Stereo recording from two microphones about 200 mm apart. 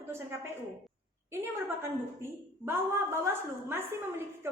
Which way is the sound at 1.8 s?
10° right (ahead or behind).